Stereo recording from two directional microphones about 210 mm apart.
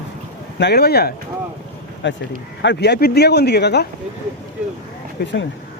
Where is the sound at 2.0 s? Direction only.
60° left (ahead or behind).